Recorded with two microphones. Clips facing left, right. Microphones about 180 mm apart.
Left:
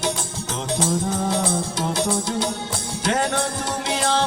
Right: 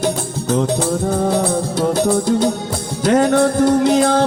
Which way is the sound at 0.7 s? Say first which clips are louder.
Right 5 dB; 40° right (ahead or behind).